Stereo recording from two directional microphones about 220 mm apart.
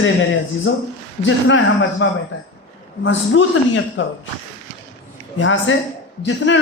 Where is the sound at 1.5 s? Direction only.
60° left (ahead or behind).